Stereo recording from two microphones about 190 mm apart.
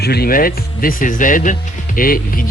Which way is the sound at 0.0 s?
55° left (ahead or behind).